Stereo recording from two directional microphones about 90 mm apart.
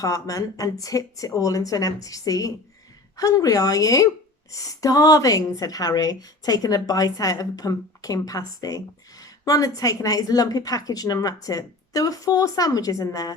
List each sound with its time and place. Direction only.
0.0 s a woman's voice: 40° left (ahead or behind)